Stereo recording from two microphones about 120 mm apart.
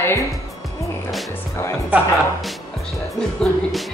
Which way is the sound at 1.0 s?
Centre (ahead or behind).